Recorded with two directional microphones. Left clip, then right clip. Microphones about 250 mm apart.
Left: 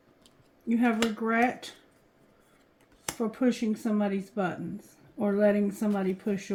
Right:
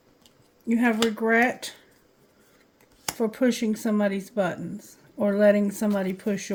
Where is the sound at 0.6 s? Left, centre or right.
Right.